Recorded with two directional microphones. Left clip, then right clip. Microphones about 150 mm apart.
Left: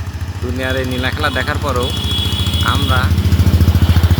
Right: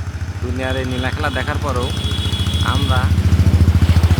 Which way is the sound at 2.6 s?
5° left (ahead or behind).